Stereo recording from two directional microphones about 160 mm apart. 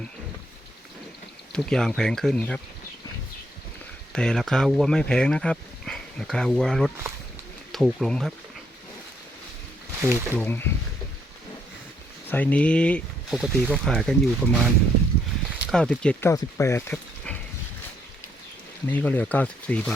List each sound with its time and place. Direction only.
1.5 s speech: 5° left (ahead or behind)
4.1 s speech: 5° left (ahead or behind)
10.1 s speech: 10° left (ahead or behind)
12.3 s speech: 10° left (ahead or behind)
16.3 s speech: 15° left (ahead or behind)
18.9 s speech: 10° left (ahead or behind)